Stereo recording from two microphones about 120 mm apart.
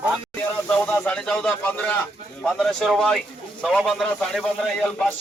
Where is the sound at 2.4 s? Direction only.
Centre (ahead or behind).